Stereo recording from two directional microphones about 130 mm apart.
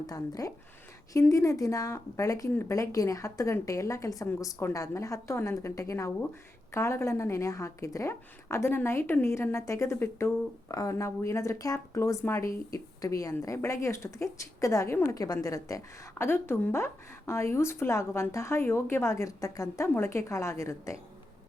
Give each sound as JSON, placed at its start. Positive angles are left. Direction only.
{"t": 0.1, "sound": "a woman's voice", "side_deg": 25}